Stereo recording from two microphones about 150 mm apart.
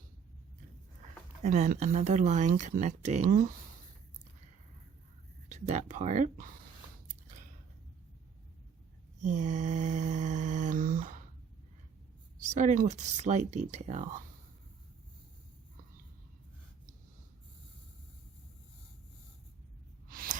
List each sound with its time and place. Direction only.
1.4 s speech: 50° right (ahead or behind)
5.5 s speech: 50° right (ahead or behind)
9.2 s mantra: 50° right (ahead or behind)
12.4 s speech: 55° right (ahead or behind)
20.1 s a sound: 70° right (ahead or behind)